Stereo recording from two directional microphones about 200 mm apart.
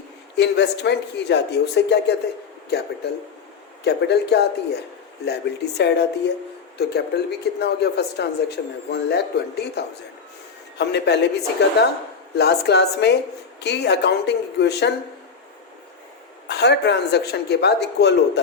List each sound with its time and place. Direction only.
0.3 s speech: 60° left (ahead or behind)
16.5 s speech: 60° left (ahead or behind)